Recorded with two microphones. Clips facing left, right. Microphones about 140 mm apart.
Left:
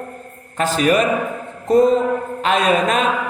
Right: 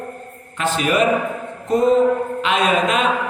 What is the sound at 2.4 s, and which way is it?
Speech, 40° left (ahead or behind).